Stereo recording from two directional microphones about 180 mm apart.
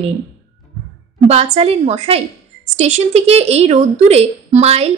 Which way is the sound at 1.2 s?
35° right (ahead or behind).